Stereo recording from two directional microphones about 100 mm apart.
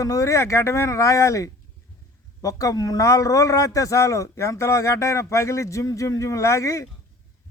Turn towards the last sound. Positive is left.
turn(degrees=30)  # may be behind; listen again after turning